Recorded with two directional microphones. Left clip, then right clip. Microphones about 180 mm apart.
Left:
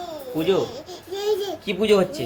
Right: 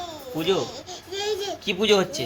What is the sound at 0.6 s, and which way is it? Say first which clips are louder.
Baby cry: left 3 dB; 25° left (ahead or behind).